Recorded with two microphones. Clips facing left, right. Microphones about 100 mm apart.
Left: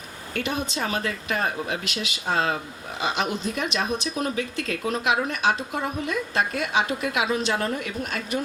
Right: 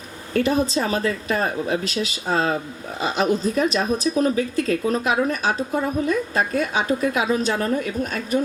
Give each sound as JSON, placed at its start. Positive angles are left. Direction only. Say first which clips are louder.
{"t": 0.3, "sound": "speech", "louder": "right 8 dB", "side_deg": -35}